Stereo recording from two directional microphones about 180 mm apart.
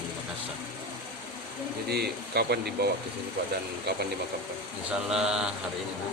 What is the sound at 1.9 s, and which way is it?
Speech, 65° right (ahead or behind).